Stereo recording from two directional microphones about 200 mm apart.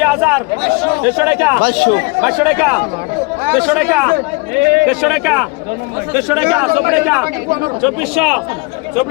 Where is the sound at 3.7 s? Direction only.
5° right (ahead or behind).